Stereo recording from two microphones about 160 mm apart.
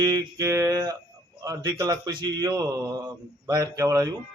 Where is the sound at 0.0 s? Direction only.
20° right (ahead or behind).